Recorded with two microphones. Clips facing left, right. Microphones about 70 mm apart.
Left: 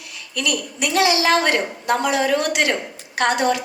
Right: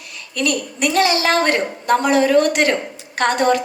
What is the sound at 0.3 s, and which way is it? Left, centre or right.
A woman's voice, right.